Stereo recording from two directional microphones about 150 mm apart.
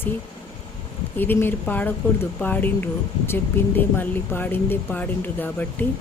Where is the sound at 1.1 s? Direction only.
15° left (ahead or behind).